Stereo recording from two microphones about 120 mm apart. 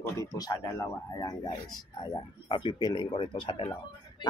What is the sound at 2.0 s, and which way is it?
Speech, 40° left (ahead or behind).